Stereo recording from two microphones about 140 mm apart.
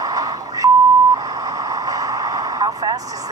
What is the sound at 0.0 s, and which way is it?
Beep, 25° right (ahead or behind).